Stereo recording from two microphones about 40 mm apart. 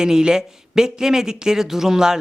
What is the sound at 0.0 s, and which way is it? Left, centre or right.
Speech, centre.